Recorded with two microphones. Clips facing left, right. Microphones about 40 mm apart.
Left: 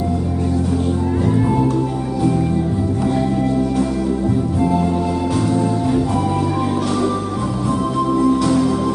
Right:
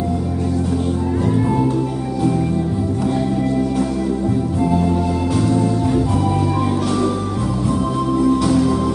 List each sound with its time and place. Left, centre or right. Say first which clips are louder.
4.7 s music: even; centre